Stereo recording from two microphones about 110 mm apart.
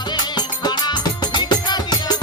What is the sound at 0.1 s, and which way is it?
Music, 40° left (ahead or behind).